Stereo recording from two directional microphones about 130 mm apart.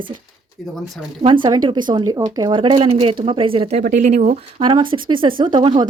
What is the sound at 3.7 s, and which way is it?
Speech, 70° right (ahead or behind).